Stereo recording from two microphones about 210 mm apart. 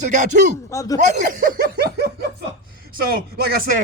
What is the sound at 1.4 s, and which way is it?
Snicker, 50° right (ahead or behind).